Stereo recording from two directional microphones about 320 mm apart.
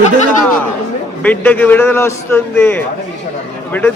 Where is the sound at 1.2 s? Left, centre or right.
Centre.